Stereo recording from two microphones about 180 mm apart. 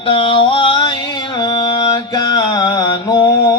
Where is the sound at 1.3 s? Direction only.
25° left (ahead or behind).